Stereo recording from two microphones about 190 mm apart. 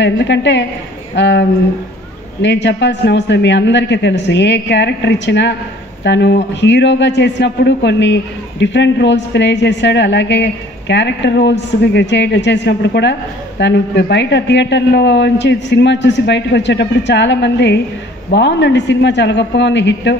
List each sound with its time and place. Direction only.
0.0 s a man's voice: 70° left (ahead or behind)
2.4 s a man's voice: 65° left (ahead or behind)